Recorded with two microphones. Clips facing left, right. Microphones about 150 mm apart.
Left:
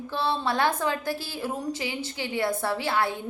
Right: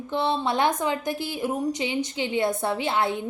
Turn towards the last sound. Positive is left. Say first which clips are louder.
# right 2 dB
turn(degrees=-20)  # may be behind; listen again after turning